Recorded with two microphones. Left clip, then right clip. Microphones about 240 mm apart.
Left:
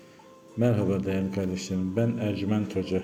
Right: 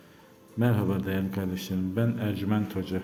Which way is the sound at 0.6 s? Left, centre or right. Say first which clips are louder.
Left 3 dB; centre.